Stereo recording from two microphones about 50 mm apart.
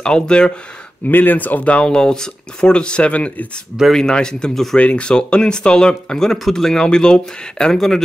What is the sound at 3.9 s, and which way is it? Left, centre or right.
Speech, centre.